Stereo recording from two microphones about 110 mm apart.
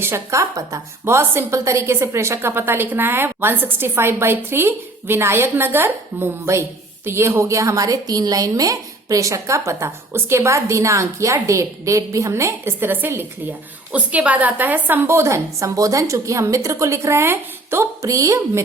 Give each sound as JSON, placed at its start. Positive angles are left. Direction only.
{"t": 0.0, "sound": "a woman's voice", "side_deg": -25}